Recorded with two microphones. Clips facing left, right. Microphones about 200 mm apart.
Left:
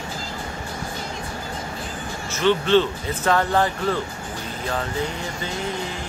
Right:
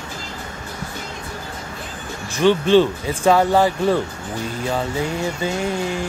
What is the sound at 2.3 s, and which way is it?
Speech, 15° right (ahead or behind).